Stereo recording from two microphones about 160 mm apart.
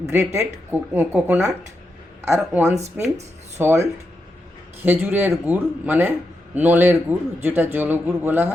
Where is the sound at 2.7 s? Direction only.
45° right (ahead or behind).